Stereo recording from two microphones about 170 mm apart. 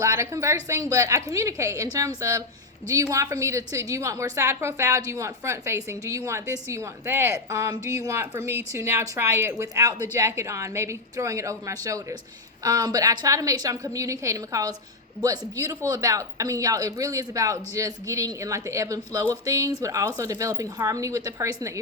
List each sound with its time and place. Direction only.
0.0 s a woman's voice: 15° right (ahead or behind)